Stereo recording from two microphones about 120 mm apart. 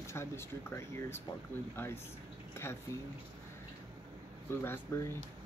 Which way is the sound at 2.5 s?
20° left (ahead or behind).